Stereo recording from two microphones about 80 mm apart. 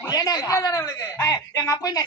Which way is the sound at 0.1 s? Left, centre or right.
Left.